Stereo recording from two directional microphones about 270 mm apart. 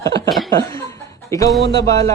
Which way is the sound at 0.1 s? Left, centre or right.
Right.